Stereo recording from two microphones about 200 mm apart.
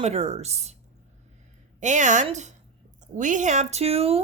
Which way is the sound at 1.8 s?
40° right (ahead or behind).